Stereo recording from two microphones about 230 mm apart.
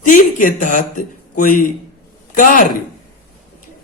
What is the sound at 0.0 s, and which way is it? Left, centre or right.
Speech, left.